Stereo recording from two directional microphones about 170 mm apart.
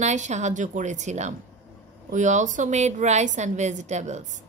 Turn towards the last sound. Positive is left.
turn(degrees=-45)  # may be behind; listen again after turning